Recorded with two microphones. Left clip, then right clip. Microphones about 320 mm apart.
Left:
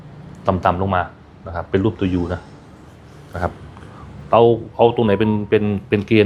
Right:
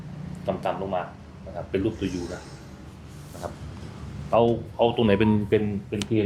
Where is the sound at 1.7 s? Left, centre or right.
Left.